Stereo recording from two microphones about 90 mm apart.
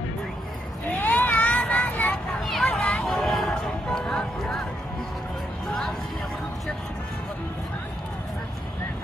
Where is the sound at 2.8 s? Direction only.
15° left (ahead or behind).